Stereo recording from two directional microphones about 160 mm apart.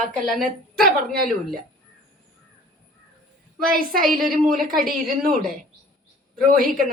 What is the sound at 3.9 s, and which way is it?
Speech, 65° right (ahead or behind).